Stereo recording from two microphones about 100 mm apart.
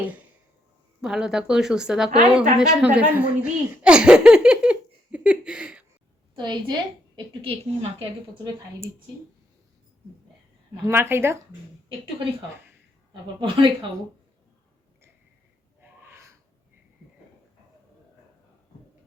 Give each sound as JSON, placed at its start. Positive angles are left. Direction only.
{"t": 1.0, "sound": "speech", "side_deg": -5}
{"t": 6.3, "sound": "a woman's voice", "side_deg": -45}
{"t": 7.4, "sound": "a woman's voice", "side_deg": -75}
{"t": 10.8, "sound": "speech", "side_deg": -25}
{"t": 11.9, "sound": "a woman's voice", "side_deg": -60}
{"t": 15.8, "sound": "gasp", "side_deg": -20}